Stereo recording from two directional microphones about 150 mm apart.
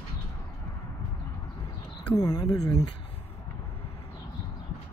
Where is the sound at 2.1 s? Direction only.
25° left (ahead or behind).